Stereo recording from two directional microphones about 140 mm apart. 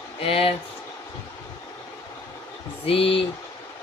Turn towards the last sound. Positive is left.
turn(degrees=40)  # may be behind; listen again after turning